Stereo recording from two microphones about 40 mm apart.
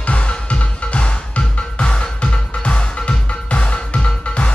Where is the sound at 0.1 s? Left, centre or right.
Left.